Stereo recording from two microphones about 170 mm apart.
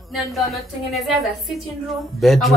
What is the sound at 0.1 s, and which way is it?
Speech, centre (ahead or behind).